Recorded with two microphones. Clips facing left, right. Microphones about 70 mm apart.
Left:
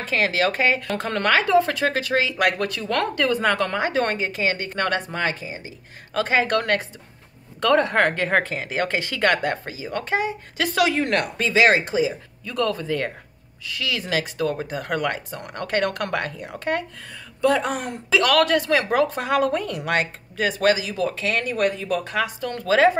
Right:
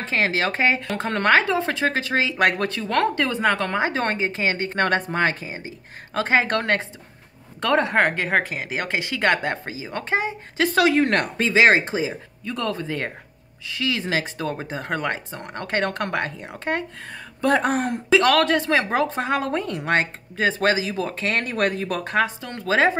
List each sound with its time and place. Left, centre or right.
0.0 s speech: right
6.1 s speech: right
11.4 s speech: right
17.1 s speech: right
22.4 s speech: right